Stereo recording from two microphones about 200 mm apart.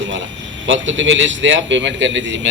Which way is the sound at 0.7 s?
70° right (ahead or behind).